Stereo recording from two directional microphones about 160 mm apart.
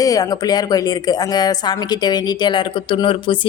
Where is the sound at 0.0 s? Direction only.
25° left (ahead or behind).